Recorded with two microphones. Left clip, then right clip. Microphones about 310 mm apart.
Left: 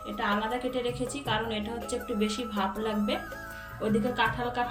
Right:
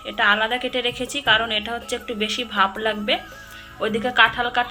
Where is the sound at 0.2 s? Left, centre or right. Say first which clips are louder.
Right 11 dB; centre.